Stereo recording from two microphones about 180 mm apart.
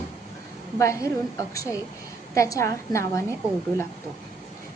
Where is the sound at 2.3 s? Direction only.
15° left (ahead or behind).